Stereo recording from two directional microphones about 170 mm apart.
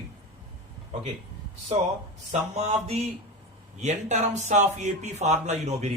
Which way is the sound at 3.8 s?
40° right (ahead or behind).